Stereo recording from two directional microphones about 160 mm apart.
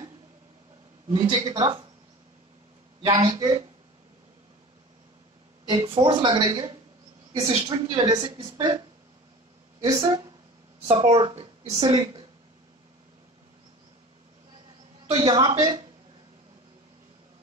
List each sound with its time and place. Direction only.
1.1 s a woman's voice: 30° right (ahead or behind)
3.1 s a woman's voice: 20° right (ahead or behind)
5.9 s a woman's voice: 30° right (ahead or behind)
9.8 s a woman's voice: 25° right (ahead or behind)
10.9 s speech: 35° right (ahead or behind)
15.1 s a woman's voice: 25° right (ahead or behind)